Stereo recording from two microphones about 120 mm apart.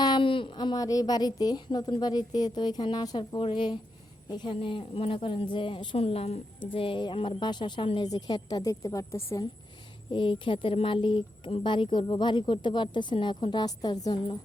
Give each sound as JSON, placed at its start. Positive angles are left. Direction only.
{"t": 0.0, "sound": "a woman's voice", "side_deg": 40}
{"t": 6.7, "sound": "a woman's voice", "side_deg": 45}
{"t": 10.1, "sound": "speech", "side_deg": 45}